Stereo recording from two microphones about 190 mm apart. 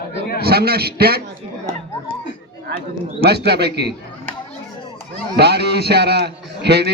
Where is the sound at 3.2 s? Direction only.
60° right (ahead or behind).